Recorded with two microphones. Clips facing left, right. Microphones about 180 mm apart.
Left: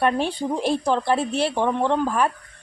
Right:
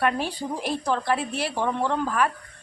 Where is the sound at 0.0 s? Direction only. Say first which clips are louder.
Left 4 dB; 25° left (ahead or behind).